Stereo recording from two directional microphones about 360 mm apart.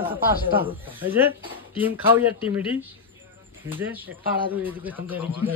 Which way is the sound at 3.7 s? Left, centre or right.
Centre.